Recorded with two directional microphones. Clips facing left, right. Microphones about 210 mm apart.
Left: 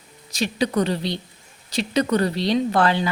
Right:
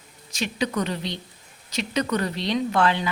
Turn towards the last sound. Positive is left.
turn(degrees=35)  # may be behind; listen again after turning